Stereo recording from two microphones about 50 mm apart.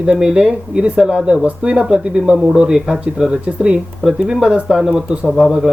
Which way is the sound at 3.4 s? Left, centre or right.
Right.